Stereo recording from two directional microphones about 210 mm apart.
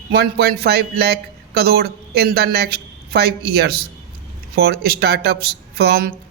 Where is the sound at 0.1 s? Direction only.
45° right (ahead or behind).